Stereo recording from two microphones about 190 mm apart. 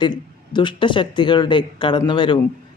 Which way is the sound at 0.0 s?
25° left (ahead or behind).